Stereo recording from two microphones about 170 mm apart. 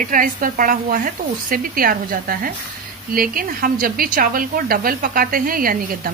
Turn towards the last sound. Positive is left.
turn(degrees=-55)  # may be behind; listen again after turning